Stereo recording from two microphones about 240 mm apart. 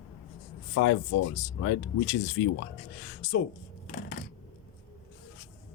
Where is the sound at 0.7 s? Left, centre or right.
Left.